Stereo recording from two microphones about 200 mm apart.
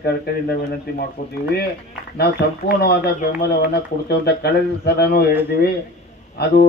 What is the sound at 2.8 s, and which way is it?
A man's voice, 55° left (ahead or behind).